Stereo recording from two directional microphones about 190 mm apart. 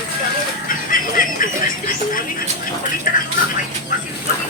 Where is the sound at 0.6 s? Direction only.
45° left (ahead or behind).